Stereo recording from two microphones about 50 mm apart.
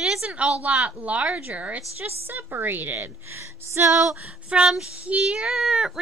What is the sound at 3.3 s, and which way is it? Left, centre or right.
Speech, right.